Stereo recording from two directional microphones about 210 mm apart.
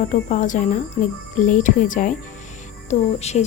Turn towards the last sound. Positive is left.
turn(degrees=30)  # may be behind; listen again after turning